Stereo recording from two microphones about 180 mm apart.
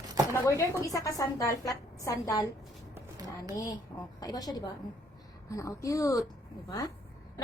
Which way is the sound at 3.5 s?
20° left (ahead or behind).